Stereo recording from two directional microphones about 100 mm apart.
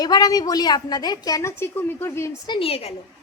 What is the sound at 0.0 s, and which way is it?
A woman's voice, 40° left (ahead or behind).